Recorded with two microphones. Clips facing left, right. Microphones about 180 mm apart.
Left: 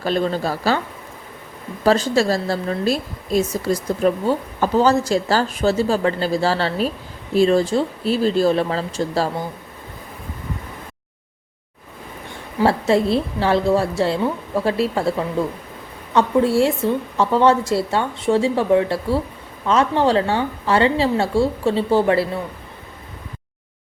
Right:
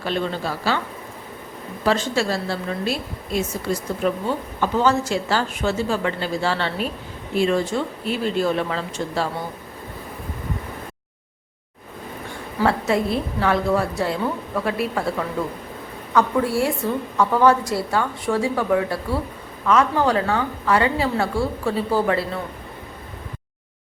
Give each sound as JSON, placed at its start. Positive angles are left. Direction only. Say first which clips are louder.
{"t": 0.0, "sound": "a woman's voice", "louder": "left 4 dB", "side_deg": 40}
{"t": 1.8, "sound": "a woman's voice", "louder": "left 4 dB", "side_deg": 40}
{"t": 12.6, "sound": "a woman's voice", "louder": "left 4 dB", "side_deg": 30}
{"t": 16.1, "sound": "a woman's voice", "louder": "left 4 dB", "side_deg": 25}